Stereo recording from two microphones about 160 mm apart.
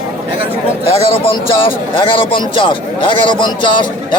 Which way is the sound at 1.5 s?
35° left (ahead or behind).